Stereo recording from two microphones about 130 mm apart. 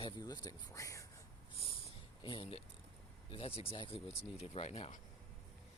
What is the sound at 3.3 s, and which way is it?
Speech, 45° left (ahead or behind).